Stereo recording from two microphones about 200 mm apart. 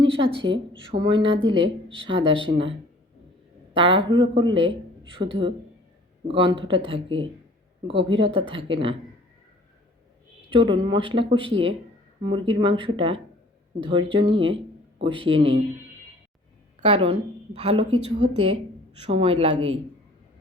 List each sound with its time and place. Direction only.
0.0 s a sound: 25° right (ahead or behind)
0.7 s speech: 25° right (ahead or behind)
1.3 s speech: 65° right (ahead or behind)
1.6 s speech: 25° right (ahead or behind)
3.8 s speech: 25° right (ahead or behind)
10.5 s speech: 25° right (ahead or behind)
16.8 s a woman's voice: 30° right (ahead or behind)